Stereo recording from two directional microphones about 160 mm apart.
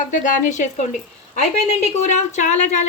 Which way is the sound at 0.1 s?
50° left (ahead or behind).